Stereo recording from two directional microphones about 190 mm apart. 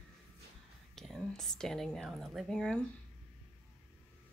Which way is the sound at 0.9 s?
Centre (ahead or behind).